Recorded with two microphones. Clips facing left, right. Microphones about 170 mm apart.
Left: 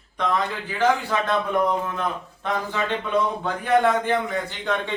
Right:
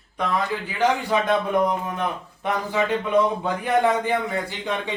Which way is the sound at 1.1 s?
15° right (ahead or behind).